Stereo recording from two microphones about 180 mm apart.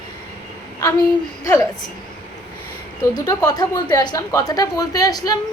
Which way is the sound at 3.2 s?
20° left (ahead or behind).